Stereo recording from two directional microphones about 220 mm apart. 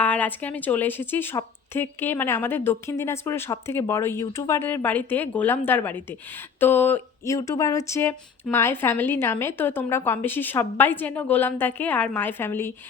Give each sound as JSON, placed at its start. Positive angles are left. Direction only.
{"t": 0.0, "sound": "speech", "side_deg": 5}